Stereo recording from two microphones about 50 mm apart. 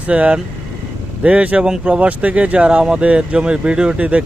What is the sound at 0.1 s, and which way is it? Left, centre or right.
Speech, right.